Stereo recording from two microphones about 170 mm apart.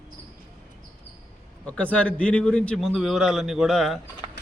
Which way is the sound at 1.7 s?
5° left (ahead or behind).